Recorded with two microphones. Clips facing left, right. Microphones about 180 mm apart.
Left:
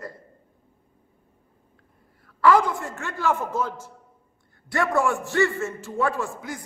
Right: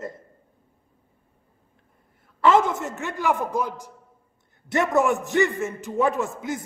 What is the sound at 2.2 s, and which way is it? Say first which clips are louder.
A man's voice: even; 25° right (ahead or behind).